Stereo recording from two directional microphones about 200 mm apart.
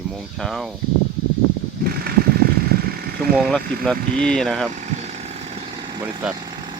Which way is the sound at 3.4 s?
Centre (ahead or behind).